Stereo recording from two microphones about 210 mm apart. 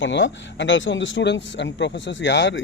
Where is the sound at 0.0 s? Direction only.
60° left (ahead or behind).